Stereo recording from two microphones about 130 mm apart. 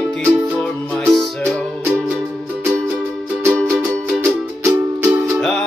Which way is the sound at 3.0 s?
15° right (ahead or behind).